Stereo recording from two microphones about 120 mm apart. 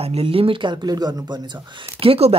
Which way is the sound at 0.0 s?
55° right (ahead or behind).